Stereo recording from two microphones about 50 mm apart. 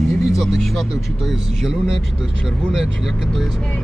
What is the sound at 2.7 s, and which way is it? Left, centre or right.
Speech, centre.